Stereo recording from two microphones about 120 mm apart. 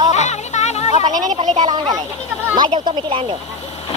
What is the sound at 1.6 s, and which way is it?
Speech, 40° right (ahead or behind).